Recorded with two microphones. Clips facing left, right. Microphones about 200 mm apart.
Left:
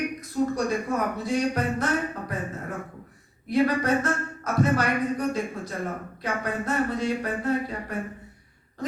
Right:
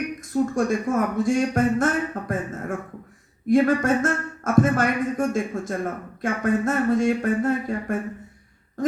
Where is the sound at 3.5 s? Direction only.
50° right (ahead or behind).